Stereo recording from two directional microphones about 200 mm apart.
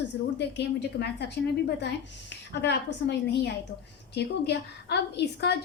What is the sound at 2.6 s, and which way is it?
A woman's voice, 60° left (ahead or behind).